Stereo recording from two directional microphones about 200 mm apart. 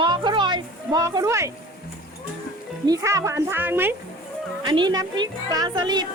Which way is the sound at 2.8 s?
15° right (ahead or behind).